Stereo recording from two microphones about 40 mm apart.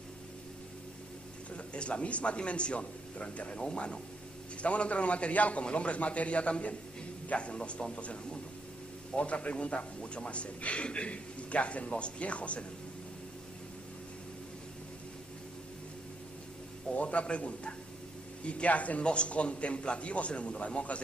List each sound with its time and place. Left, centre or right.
1.7 s a man's voice: left
16.9 s a man's voice: left